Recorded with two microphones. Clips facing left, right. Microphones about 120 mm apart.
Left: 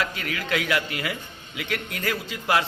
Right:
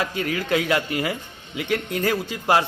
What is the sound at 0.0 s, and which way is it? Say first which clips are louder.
A man's voice: right 4 dB; 25° right (ahead or behind).